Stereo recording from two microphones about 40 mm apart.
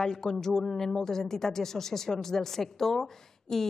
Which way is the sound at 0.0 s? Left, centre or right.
Centre.